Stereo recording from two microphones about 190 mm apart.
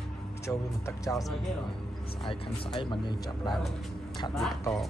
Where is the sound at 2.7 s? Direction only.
25° left (ahead or behind).